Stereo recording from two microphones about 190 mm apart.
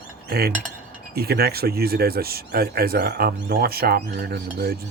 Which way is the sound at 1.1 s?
55° right (ahead or behind).